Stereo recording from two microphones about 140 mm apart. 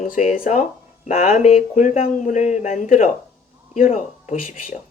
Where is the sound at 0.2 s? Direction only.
60° left (ahead or behind).